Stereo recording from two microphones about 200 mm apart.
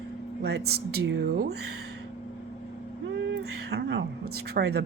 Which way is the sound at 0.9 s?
65° right (ahead or behind).